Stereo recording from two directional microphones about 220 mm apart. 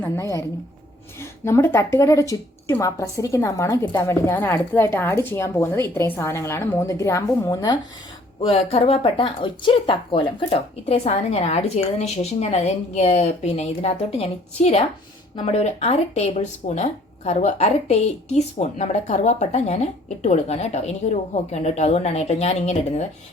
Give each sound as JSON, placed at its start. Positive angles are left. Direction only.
{"t": 0.0, "sound": "a woman's voice", "side_deg": 15}
{"t": 8.4, "sound": "speech", "side_deg": 25}